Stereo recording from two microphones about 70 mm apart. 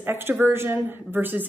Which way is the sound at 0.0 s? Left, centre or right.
Right.